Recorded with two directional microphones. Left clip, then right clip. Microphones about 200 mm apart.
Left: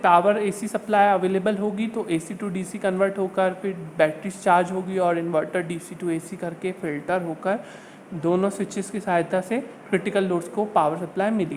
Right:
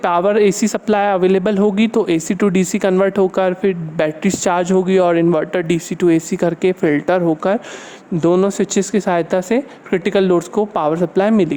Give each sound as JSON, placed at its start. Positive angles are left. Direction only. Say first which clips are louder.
{"t": 0.0, "sound": "speech", "louder": "right 4 dB", "side_deg": -50}